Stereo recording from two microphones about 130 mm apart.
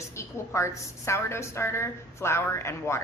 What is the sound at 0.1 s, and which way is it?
A woman's voice, 20° left (ahead or behind).